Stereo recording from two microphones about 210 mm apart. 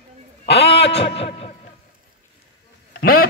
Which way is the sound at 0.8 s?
55° left (ahead or behind).